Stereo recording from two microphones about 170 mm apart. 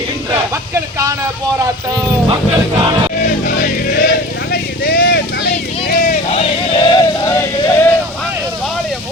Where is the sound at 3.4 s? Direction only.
55° left (ahead or behind).